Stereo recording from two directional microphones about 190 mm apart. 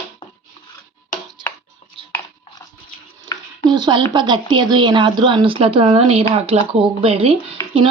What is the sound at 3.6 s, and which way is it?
A woman's voice, 20° right (ahead or behind).